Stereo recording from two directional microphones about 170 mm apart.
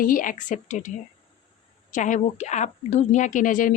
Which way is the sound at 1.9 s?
45° left (ahead or behind).